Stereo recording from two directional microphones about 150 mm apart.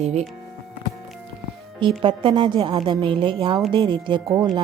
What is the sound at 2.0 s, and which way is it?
Speech, 35° right (ahead or behind).